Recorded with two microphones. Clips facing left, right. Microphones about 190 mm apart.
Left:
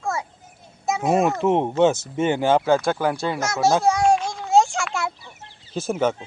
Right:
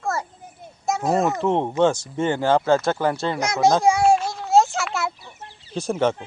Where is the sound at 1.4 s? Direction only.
15° left (ahead or behind).